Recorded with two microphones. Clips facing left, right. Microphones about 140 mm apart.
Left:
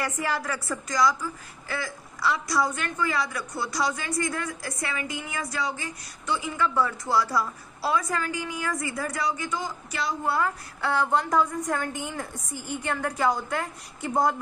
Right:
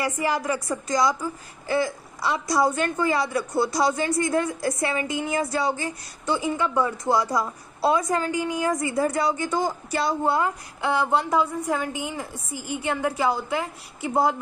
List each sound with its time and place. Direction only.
0.0 s a woman's voice: 15° right (ahead or behind)